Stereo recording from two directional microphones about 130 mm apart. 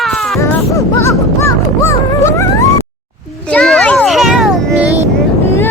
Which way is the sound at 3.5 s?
5° left (ahead or behind).